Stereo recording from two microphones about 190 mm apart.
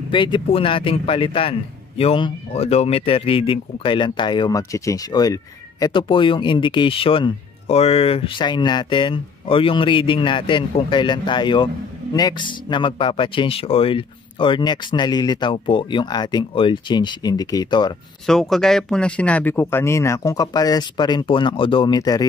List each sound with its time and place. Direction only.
0.1 s a man's voice: 25° left (ahead or behind)
18.2 s speech: centre (ahead or behind); by 22.2 s 20° left (ahead or behind)